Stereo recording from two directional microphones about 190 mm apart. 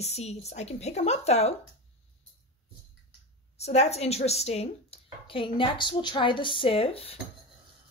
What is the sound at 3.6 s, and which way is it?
Speech, 35° left (ahead or behind).